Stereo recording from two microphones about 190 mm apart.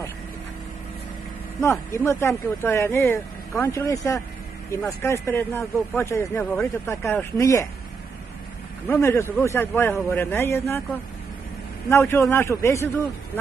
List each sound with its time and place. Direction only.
1.6 s speech: 15° left (ahead or behind)
8.8 s speech: 10° left (ahead or behind)
11.9 s speech: 15° left (ahead or behind)